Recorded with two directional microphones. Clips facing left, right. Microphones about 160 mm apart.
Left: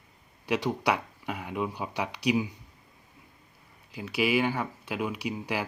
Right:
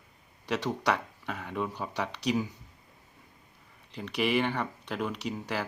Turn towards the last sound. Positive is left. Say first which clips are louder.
# left 2 dB
turn(degrees=10)  # may be behind; listen again after turning